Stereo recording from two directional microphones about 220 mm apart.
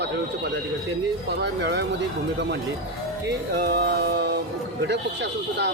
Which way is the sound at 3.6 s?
45° right (ahead or behind).